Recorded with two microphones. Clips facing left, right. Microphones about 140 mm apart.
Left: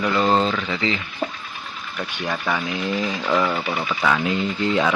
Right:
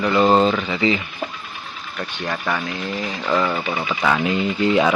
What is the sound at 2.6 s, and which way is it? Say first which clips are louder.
Speech: left 2 dB; 15° left (ahead or behind).